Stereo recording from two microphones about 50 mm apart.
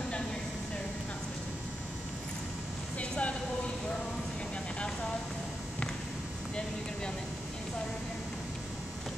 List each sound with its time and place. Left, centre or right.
3.0 s vehicle: left